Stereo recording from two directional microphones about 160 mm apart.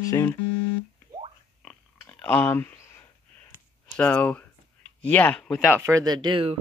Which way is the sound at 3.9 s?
10° left (ahead or behind).